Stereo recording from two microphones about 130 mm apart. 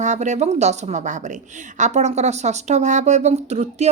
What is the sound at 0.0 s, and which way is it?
Speech, 65° right (ahead or behind).